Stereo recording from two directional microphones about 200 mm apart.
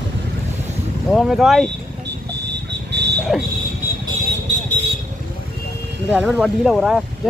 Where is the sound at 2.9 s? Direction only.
60° right (ahead or behind).